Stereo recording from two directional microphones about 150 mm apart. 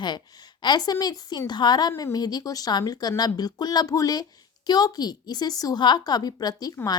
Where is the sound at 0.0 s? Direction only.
25° left (ahead or behind).